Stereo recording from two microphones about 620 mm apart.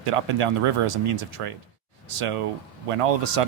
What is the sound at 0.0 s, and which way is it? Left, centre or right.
Speech, right.